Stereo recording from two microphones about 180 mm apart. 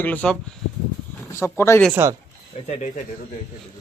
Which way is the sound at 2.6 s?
40° left (ahead or behind).